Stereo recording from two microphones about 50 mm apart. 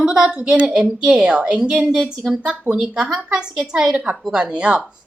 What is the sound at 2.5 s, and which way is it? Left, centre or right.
Speech, right.